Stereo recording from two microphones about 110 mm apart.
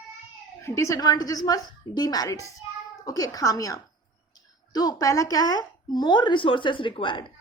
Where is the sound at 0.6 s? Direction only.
25° left (ahead or behind).